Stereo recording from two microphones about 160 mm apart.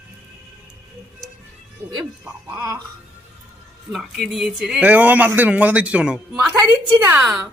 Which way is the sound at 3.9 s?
Centre (ahead or behind).